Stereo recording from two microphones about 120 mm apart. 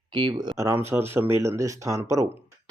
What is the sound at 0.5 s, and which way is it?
Speech, 20° right (ahead or behind).